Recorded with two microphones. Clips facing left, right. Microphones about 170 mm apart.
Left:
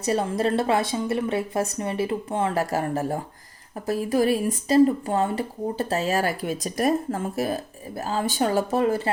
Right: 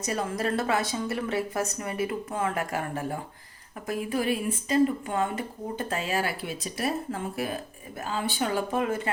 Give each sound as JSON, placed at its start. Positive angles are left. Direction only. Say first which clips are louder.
{"t": 0.0, "sound": "a woman's voice", "louder": "left 6 dB", "side_deg": 30}